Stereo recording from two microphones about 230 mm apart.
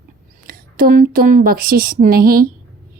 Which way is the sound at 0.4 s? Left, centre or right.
Right.